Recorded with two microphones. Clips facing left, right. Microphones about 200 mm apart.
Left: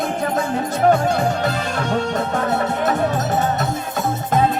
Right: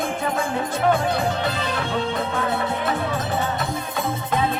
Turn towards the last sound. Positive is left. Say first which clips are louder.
# left 5 dB
turn(degrees=45)  # may be behind; listen again after turning